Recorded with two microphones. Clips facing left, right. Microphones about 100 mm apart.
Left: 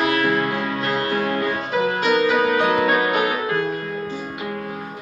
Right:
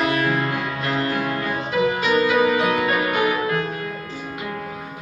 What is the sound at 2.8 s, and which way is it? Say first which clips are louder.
Music: left 3 dB; 35° left (ahead or behind).